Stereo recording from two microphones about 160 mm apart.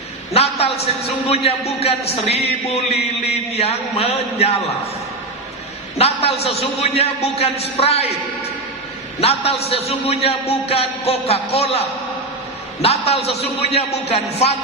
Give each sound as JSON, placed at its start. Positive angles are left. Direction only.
{"t": 0.4, "sound": "a sound", "side_deg": 40}
{"t": 1.3, "sound": "a man's voice", "side_deg": 40}
{"t": 6.0, "sound": "a man's voice", "side_deg": 40}
{"t": 9.2, "sound": "a man's voice", "side_deg": 40}